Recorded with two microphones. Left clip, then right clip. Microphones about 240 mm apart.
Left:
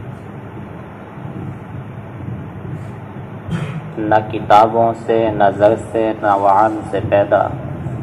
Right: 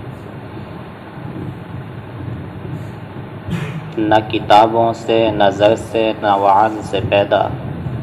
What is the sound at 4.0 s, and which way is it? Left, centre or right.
Speech, right.